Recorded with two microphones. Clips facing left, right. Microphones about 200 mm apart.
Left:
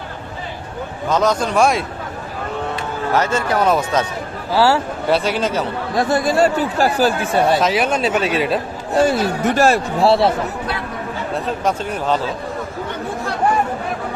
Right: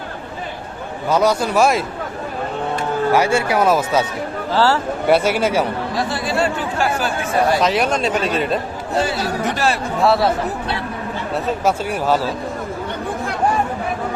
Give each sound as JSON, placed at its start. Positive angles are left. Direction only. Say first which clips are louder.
{"t": 1.1, "sound": "speech", "louder": "right 1 dB", "side_deg": -10}
{"t": 3.1, "sound": "speech", "louder": "right 1 dB", "side_deg": -10}
{"t": 4.5, "sound": "speech", "louder": "left 2 dB", "side_deg": 10}
{"t": 5.0, "sound": "speech", "louder": "right 3 dB", "side_deg": -10}
{"t": 6.0, "sound": "speech", "louder": "left 6 dB", "side_deg": 45}
{"t": 7.5, "sound": "speech", "louder": "even", "side_deg": 0}
{"t": 9.6, "sound": "a man's voice", "louder": "left 8 dB", "side_deg": 45}
{"t": 10.0, "sound": "speech", "louder": "left 1 dB", "side_deg": 30}
{"t": 11.6, "sound": "speech", "louder": "right 2 dB", "side_deg": -10}